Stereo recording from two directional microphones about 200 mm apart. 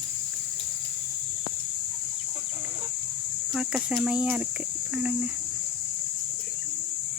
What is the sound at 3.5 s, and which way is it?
Speech, centre (ahead or behind).